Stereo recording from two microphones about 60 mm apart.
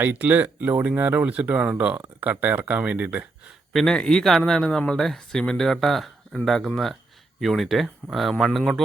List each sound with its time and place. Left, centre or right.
0.0 s speech: right
3.7 s speech: centre